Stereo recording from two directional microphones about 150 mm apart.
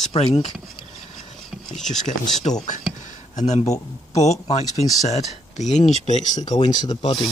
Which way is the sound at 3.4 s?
50° left (ahead or behind).